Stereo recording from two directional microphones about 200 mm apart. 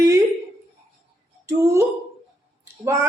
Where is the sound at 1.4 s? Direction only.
15° right (ahead or behind).